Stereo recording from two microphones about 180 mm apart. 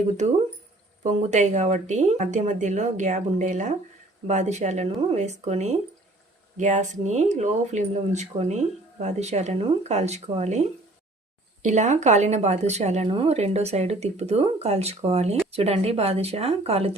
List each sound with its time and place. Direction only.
1.3 s speech: 40° right (ahead or behind)